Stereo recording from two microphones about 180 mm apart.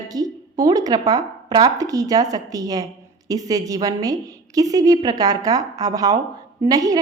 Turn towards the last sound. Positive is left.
turn(degrees=-20)  # may be behind; listen again after turning